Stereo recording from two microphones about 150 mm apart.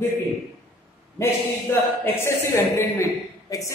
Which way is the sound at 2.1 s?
15° left (ahead or behind).